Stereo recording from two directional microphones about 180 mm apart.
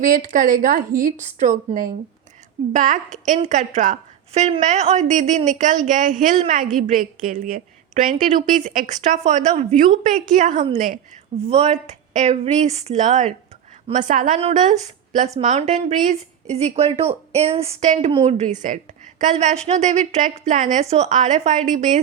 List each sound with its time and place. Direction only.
0.0 s a woman's voice: 50° right (ahead or behind)
8.6 s a woman's voice: 45° right (ahead or behind)
11.4 s a woman's voice: 35° right (ahead or behind)